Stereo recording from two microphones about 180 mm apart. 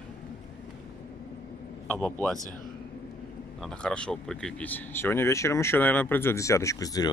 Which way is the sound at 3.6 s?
5° left (ahead or behind).